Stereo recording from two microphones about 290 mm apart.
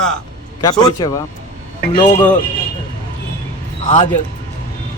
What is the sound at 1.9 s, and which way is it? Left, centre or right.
Speech, centre.